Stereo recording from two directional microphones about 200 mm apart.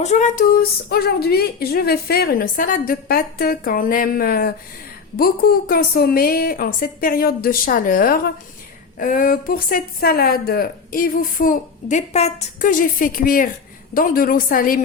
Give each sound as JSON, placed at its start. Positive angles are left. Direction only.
{"t": 0.0, "sound": "a woman's voice", "side_deg": 35}